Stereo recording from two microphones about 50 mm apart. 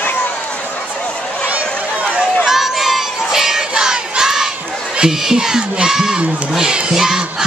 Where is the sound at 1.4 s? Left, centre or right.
Right.